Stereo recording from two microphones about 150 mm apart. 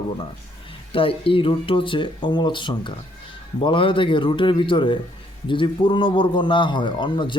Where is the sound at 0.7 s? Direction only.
35° left (ahead or behind).